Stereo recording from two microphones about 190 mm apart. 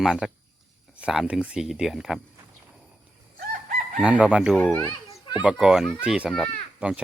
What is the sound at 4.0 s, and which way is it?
Speech, 5° right (ahead or behind).